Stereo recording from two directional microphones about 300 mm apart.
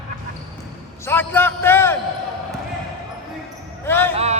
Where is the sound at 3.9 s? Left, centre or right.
Centre.